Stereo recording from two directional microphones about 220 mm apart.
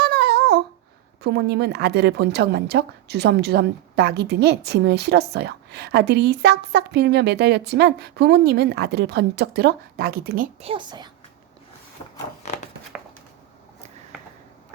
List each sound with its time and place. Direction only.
0.0 s babbling: 45° right (ahead or behind)
1.2 s a woman's voice: 50° right (ahead or behind)
10.7 s a child's voice: 20° right (ahead or behind)